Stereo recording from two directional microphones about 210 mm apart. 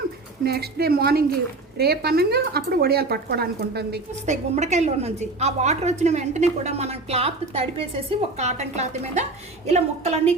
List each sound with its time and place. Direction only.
0.4 s speech: 50° right (ahead or behind)
4.3 s a woman's voice: 30° right (ahead or behind)